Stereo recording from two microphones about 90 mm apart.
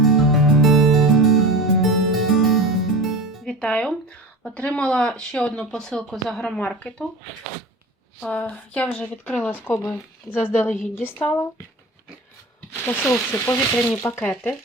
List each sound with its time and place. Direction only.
0.0 s music: centre (ahead or behind)
3.4 s music: 15° left (ahead or behind)
4.4 s speech: 10° left (ahead or behind)
6.6 s speech: 15° left (ahead or behind)
8.2 s speech: 10° left (ahead or behind)
9.6 s speech: 25° left (ahead or behind)
12.8 s speech: 25° left (ahead or behind)